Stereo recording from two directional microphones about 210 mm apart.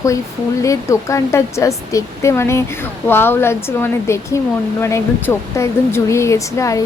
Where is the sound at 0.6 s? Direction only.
15° left (ahead or behind).